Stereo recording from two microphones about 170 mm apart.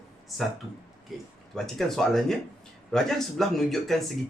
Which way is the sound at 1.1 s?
Centre (ahead or behind).